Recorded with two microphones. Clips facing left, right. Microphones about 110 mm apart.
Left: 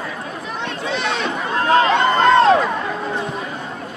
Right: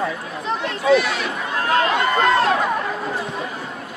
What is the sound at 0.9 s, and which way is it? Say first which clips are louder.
Run: right 5 dB; 25° left (ahead or behind).